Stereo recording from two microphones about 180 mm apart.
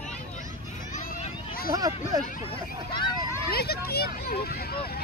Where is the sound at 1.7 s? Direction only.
20° right (ahead or behind).